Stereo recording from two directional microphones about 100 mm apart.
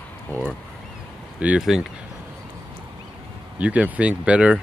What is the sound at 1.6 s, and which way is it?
Speech, 5° right (ahead or behind).